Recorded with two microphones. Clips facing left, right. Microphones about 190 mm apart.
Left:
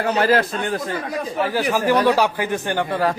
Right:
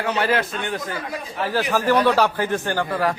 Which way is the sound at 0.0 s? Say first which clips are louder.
Left 4 dB; 40° left (ahead or behind).